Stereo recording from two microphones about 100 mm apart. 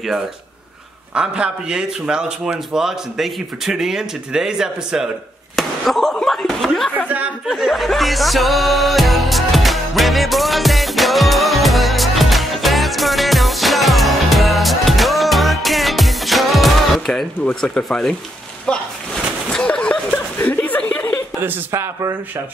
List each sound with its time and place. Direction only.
1.1 s speech: 10° right (ahead or behind)
5.6 s slap: centre (ahead or behind)
7.4 s music: centre (ahead or behind)
17.6 s speech: 5° left (ahead or behind)
19.5 s a sound: 10° left (ahead or behind)
20.3 s chuckle: 15° left (ahead or behind)
21.4 s speech: 20° right (ahead or behind)